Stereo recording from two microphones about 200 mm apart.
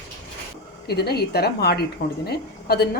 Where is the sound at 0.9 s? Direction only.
55° left (ahead or behind).